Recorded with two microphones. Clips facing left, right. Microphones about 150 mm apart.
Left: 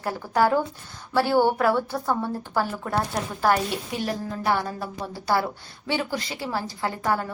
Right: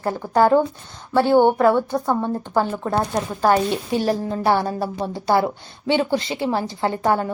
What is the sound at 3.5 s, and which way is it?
A woman's voice, 30° right (ahead or behind).